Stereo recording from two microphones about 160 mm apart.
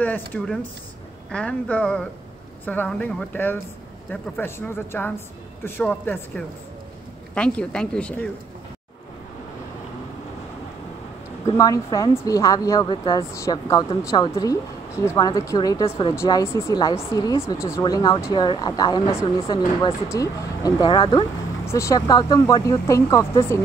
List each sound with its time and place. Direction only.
0.0 s speech: 10° left (ahead or behind)
11.5 s speech: 20° left (ahead or behind)
19.4 s speech: 30° left (ahead or behind)
21.6 s speech: 20° left (ahead or behind)